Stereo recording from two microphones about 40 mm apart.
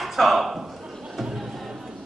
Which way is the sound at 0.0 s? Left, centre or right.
Centre.